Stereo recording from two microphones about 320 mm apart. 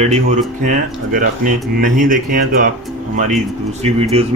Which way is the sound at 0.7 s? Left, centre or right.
Right.